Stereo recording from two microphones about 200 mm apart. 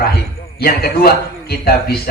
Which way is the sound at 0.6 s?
50° left (ahead or behind).